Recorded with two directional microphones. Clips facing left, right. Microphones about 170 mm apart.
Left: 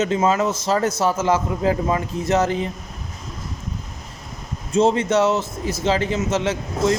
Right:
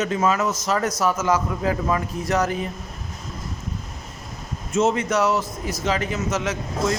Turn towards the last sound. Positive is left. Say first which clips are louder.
# left 4 dB
turn(degrees=30)  # may be behind; listen again after turning